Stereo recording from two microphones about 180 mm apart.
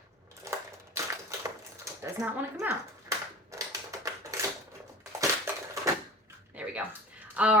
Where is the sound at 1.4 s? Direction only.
15° right (ahead or behind).